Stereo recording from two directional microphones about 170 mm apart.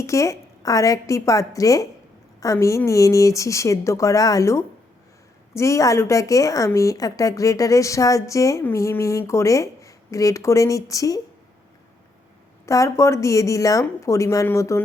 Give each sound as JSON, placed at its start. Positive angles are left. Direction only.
{"t": 0.0, "sound": "a woman's voice", "side_deg": 15}
{"t": 12.6, "sound": "a woman's voice", "side_deg": 20}